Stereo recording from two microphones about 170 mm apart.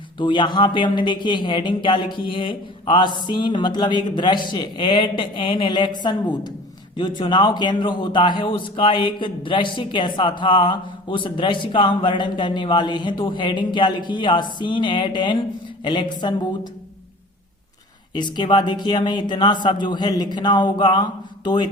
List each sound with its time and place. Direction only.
0.2 s a man's voice: 30° left (ahead or behind)
18.1 s a man's voice: 25° left (ahead or behind)